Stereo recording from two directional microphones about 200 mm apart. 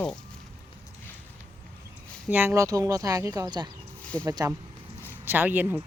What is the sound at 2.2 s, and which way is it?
Speech, 10° right (ahead or behind).